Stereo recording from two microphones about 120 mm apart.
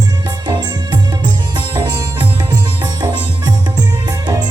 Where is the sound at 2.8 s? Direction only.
35° right (ahead or behind).